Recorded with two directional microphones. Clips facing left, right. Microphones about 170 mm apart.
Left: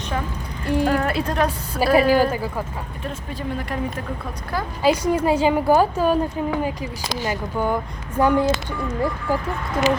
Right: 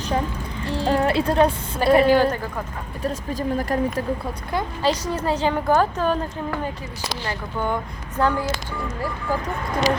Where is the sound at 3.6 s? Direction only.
40° right (ahead or behind).